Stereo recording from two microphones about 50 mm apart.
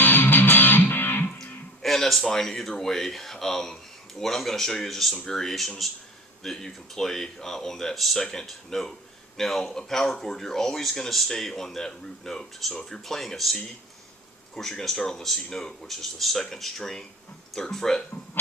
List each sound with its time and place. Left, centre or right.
0.0 s music: left
1.4 s speech: centre